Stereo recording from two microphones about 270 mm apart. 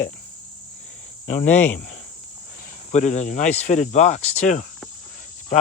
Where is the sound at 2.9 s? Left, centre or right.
Left.